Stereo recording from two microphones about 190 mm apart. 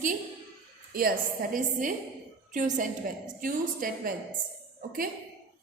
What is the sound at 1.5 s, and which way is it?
A woman's voice, 45° right (ahead or behind).